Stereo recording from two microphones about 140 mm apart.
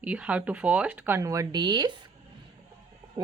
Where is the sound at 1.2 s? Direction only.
25° right (ahead or behind).